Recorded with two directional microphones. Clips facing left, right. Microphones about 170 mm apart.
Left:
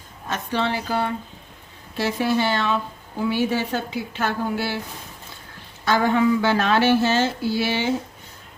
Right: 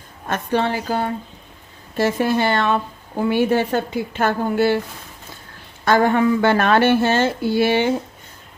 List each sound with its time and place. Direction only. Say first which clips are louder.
0.3 s a woman's voice: right 4 dB; 50° right (ahead or behind)
5.8 s a woman's voice: right 3 dB; 55° right (ahead or behind)